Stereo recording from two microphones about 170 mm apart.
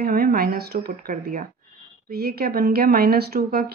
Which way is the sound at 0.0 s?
60° right (ahead or behind).